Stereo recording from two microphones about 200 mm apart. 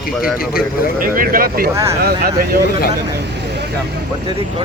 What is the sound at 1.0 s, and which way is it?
Speech, 45° right (ahead or behind).